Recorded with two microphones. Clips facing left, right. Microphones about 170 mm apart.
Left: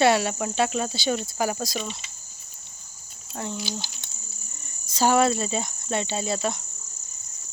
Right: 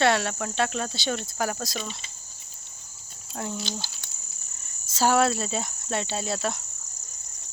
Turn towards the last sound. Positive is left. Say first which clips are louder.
# left 2 dB
turn(degrees=0)  # may be behind; listen again after turning